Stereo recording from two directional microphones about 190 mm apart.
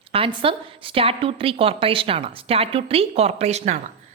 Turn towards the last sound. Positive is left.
turn(degrees=-35)  # may be behind; listen again after turning